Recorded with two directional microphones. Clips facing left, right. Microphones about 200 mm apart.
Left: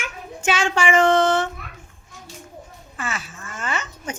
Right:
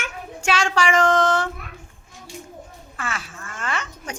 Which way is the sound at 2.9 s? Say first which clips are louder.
Left 1 dB; 5° left (ahead or behind).